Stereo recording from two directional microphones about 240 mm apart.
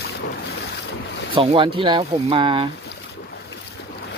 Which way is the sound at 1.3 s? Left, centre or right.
Right.